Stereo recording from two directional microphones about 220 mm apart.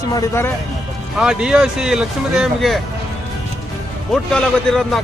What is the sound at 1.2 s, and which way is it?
Speech, 5° right (ahead or behind).